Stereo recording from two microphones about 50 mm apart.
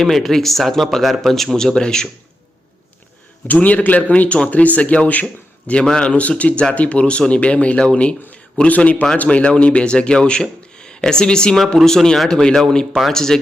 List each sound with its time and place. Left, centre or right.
0.0 s speech: centre
3.4 s a man's voice: left
5.8 s speech: centre